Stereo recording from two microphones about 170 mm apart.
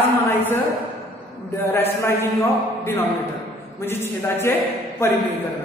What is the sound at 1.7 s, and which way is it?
Speech, 15° left (ahead or behind).